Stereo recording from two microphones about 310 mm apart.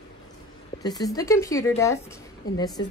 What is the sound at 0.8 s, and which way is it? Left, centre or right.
Speech, centre.